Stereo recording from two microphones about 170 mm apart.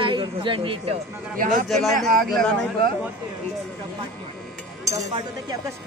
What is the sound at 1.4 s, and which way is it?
Speech, 50° right (ahead or behind).